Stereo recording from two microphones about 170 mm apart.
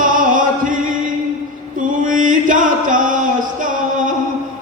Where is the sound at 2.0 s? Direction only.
50° right (ahead or behind).